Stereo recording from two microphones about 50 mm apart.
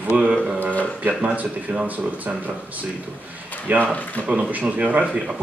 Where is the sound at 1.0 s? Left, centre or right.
Right.